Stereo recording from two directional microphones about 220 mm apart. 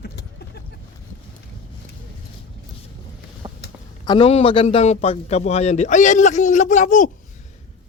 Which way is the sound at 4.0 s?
20° left (ahead or behind).